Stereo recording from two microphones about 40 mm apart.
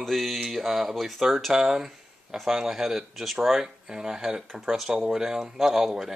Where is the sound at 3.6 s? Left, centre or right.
Centre.